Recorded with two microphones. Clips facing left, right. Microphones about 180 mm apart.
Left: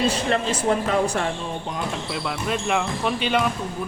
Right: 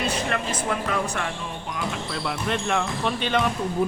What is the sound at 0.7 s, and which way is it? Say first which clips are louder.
Speech: left 6 dB; 30° left (ahead or behind).